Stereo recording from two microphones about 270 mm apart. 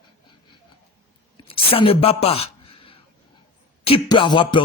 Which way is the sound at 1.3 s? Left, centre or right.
Centre.